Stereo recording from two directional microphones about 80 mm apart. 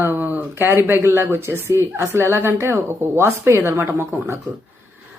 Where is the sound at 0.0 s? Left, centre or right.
Right.